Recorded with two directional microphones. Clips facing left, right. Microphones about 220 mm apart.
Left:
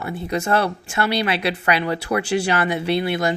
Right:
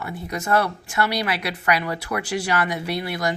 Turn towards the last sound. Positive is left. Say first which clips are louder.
# left 5 dB
turn(degrees=25)  # may be behind; listen again after turning